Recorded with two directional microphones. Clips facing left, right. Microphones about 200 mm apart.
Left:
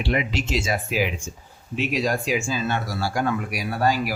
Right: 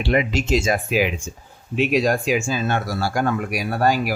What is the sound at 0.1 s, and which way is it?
Speech, 50° right (ahead or behind).